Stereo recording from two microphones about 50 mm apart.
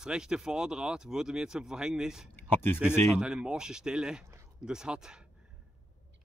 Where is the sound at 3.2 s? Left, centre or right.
Centre.